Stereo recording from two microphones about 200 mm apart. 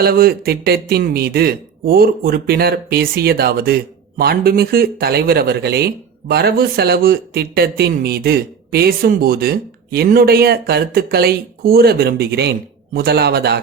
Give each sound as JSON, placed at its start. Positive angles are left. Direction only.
{"t": 0.0, "sound": "speech", "side_deg": -50}